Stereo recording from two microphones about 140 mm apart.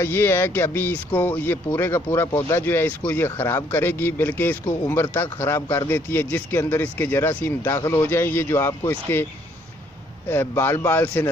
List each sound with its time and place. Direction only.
0.0 s speech: 15° left (ahead or behind)
10.3 s speech: 15° left (ahead or behind)